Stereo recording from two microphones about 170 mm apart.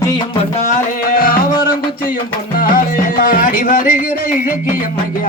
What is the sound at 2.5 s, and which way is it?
Music, 55° left (ahead or behind).